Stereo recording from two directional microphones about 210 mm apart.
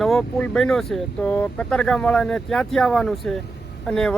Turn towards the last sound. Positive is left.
turn(degrees=0)  # may be behind; listen again after turning